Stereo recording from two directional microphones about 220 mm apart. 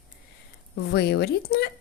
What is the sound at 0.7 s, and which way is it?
Speech, 45° left (ahead or behind).